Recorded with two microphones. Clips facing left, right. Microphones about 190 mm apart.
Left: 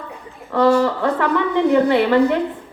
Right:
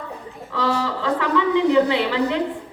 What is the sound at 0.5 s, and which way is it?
A woman's voice, 55° left (ahead or behind).